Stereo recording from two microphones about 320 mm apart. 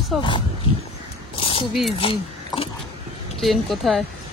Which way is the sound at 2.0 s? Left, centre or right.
Centre.